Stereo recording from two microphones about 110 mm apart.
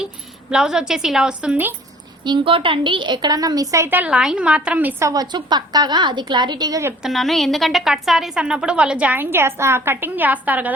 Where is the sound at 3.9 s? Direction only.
10° right (ahead or behind).